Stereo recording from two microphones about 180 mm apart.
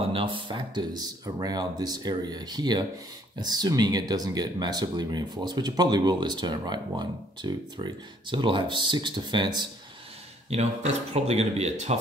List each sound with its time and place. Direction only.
0.1 s speech: 30° right (ahead or behind)
10.5 s speech: 40° right (ahead or behind)